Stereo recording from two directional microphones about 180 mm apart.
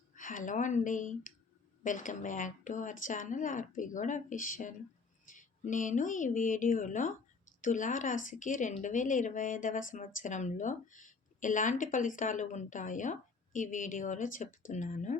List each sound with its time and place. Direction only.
0.1 s speech: 45° left (ahead or behind)